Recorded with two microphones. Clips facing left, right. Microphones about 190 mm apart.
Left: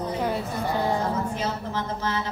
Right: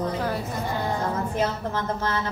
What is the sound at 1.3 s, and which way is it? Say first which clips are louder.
Speech: right 3 dB; 55° right (ahead or behind).